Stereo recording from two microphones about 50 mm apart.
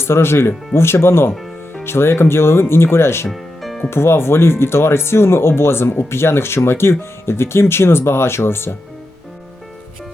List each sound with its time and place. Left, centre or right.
0.0 s speech: left
3.2 s music: centre
3.8 s speech: left